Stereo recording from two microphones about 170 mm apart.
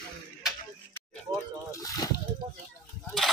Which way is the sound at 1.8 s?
20° left (ahead or behind).